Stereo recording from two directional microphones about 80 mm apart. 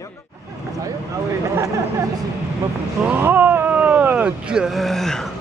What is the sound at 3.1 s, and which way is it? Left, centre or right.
Speech, right.